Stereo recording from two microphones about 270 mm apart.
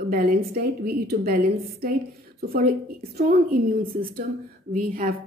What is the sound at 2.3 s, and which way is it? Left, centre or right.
Speech, right.